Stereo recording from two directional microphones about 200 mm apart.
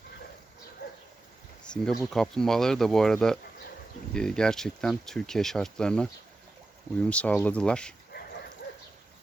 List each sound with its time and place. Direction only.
0.8 s dog: 50° left (ahead or behind)
1.6 s speech: 5° left (ahead or behind)
8.1 s dog: 55° left (ahead or behind)